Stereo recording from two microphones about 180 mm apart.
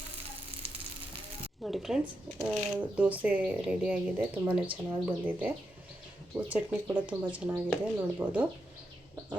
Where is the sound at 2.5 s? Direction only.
5° right (ahead or behind).